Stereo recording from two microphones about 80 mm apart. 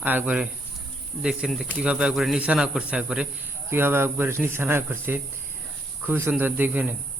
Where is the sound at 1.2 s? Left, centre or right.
Centre.